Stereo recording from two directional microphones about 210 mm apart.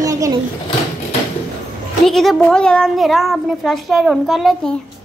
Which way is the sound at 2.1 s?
Centre (ahead or behind).